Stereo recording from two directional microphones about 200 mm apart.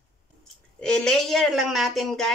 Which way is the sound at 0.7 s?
5° left (ahead or behind).